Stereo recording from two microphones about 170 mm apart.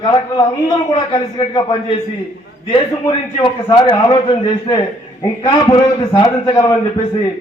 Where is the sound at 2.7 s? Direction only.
25° left (ahead or behind).